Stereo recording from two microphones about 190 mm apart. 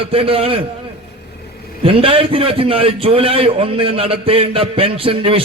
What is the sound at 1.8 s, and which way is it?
A man's voice, 30° right (ahead or behind).